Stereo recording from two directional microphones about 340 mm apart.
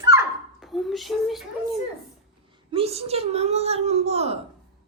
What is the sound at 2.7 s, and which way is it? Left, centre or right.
A child's voice, centre.